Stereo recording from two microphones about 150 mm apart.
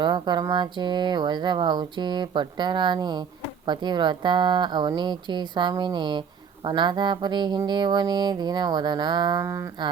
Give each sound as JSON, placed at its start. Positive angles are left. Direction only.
{"t": 0.0, "sound": "speech", "side_deg": -30}